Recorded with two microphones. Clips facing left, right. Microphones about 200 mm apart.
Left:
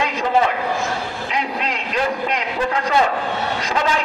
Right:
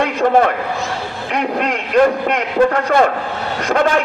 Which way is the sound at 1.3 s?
55° right (ahead or behind).